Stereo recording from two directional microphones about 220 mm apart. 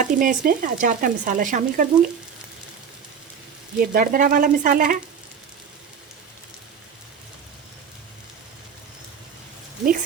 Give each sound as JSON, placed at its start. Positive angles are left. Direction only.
{"t": 0.0, "sound": "speech", "side_deg": -35}
{"t": 3.8, "sound": "speech", "side_deg": -40}